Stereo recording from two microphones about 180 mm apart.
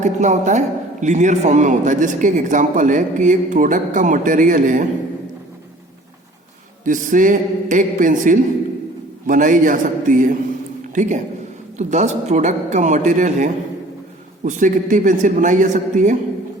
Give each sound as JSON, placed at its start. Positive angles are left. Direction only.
{"t": 0.0, "sound": "a woman's voice", "side_deg": -40}
{"t": 6.8, "sound": "a man's voice", "side_deg": -45}